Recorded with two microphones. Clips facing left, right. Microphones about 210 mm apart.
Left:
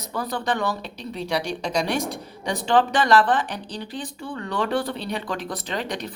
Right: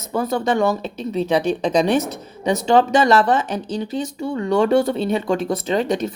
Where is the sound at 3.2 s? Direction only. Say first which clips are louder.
Right 4 dB; 45° right (ahead or behind).